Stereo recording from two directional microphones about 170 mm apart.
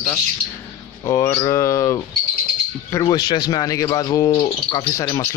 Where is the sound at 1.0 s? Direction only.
20° left (ahead or behind).